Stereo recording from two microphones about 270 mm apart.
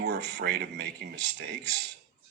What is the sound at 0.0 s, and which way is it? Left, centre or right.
Speech, right.